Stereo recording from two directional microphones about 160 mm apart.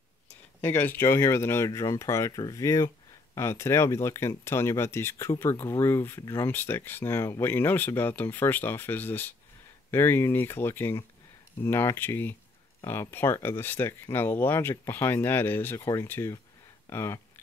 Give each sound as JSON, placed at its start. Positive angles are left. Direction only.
{"t": 0.6, "sound": "speech", "side_deg": 15}